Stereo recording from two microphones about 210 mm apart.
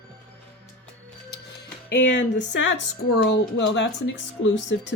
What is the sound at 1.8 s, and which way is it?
Speech, 55° left (ahead or behind).